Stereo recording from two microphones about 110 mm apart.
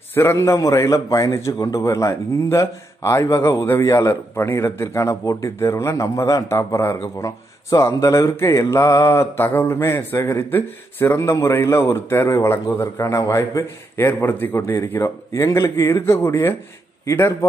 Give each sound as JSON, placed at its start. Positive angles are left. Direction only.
{"t": 0.1, "sound": "a man's voice", "side_deg": 20}